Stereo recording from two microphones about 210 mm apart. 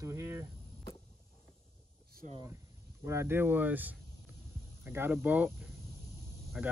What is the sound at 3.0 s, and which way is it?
Speech, 10° right (ahead or behind).